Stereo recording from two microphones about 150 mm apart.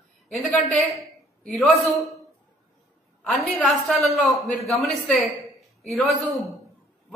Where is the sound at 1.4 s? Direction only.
Centre (ahead or behind).